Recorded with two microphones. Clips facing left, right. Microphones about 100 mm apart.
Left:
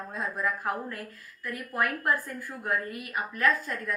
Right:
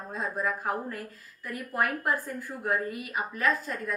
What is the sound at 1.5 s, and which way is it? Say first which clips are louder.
Speech: even; 15° right (ahead or behind).